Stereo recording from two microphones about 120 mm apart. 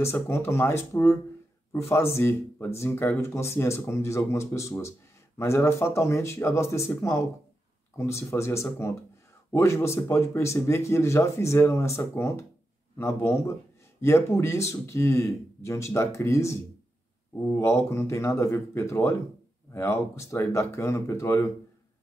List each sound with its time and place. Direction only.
0.0 s speech: 20° left (ahead or behind)